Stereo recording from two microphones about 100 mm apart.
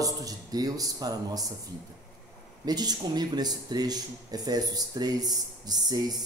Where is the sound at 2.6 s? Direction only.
40° right (ahead or behind).